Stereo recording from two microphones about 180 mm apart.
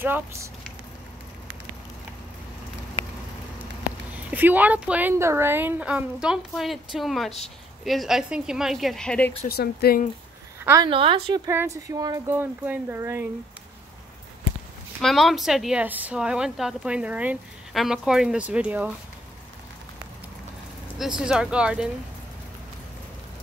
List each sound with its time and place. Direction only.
0.0 s speech: 15° right (ahead or behind)
4.3 s a woman's voice: 10° right (ahead or behind)
9.5 s speech: 60° left (ahead or behind)
10.6 s speech: 15° right (ahead or behind)
10.9 s speech: 30° right (ahead or behind)
11.4 s speech: 15° right (ahead or behind)
15.0 s a woman's voice: centre (ahead or behind)
21.0 s a woman's voice: 5° right (ahead or behind)